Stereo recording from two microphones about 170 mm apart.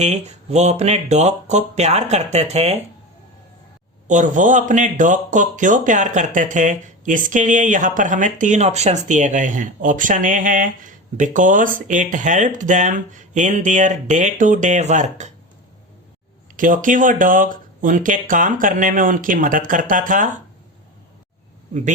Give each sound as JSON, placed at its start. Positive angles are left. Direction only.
{"t": 0.0, "sound": "speech", "side_deg": -40}
{"t": 4.0, "sound": "speech", "side_deg": -45}
{"t": 16.6, "sound": "speech", "side_deg": -50}
{"t": 21.7, "sound": "speech", "side_deg": -45}